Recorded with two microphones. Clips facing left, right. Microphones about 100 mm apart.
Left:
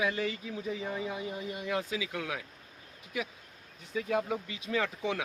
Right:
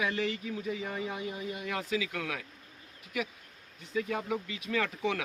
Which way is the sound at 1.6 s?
20° left (ahead or behind).